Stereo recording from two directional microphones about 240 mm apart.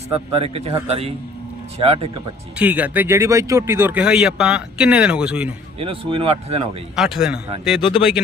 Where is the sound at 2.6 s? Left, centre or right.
Centre.